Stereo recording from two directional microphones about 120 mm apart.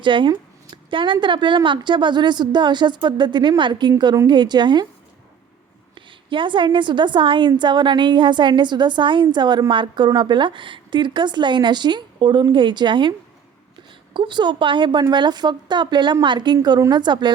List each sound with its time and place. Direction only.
0.0 s a woman's voice: 45° right (ahead or behind)
5.9 s a woman's voice: 40° right (ahead or behind)